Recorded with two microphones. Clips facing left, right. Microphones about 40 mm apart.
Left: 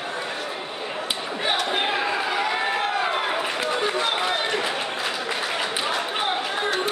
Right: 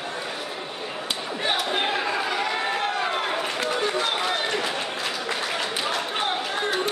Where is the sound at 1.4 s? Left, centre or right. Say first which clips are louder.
Left 1 dB; centre.